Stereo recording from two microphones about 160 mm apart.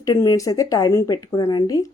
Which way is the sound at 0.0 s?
20° left (ahead or behind).